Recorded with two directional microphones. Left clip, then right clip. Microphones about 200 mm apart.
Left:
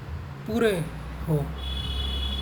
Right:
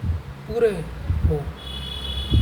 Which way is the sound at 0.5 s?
45° left (ahead or behind).